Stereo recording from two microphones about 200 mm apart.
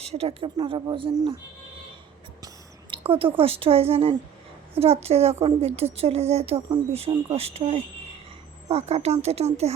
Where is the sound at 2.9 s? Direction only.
30° right (ahead or behind).